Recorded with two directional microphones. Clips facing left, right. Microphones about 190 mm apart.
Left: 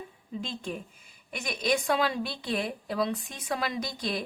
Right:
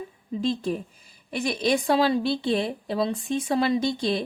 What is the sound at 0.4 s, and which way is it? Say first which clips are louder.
A woman's voice: right 13 dB; 35° right (ahead or behind).